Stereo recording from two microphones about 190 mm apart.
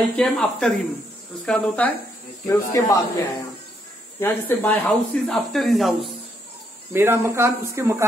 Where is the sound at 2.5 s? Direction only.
15° left (ahead or behind).